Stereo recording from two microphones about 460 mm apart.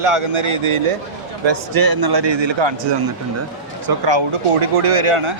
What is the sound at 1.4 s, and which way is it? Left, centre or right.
A man's voice, right.